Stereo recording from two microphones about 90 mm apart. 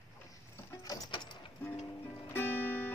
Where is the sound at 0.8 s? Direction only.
45° left (ahead or behind).